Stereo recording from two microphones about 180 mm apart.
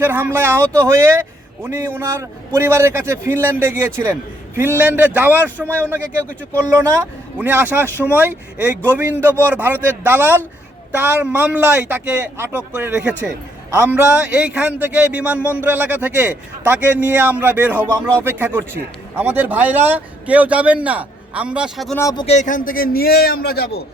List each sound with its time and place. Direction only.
0.0 s a man's voice: 10° right (ahead or behind)
7.3 s a man's voice: 10° right (ahead or behind)
21.9 s speech: 20° left (ahead or behind)
22.3 s a man's voice: 45° left (ahead or behind); by 23.8 s 60° left (ahead or behind)